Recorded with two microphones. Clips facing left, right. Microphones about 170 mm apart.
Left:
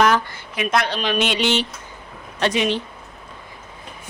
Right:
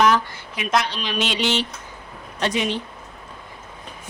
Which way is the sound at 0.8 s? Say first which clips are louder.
Left 4 dB; 60° left (ahead or behind).